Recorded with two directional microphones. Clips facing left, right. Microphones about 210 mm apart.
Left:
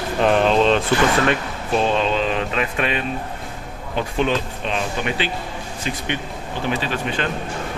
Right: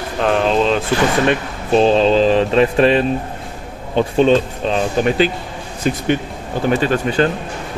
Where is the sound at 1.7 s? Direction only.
30° right (ahead or behind).